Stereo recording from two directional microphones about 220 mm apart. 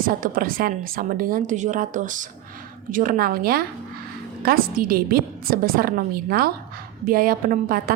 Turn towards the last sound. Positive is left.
turn(degrees=-40)  # may be behind; listen again after turning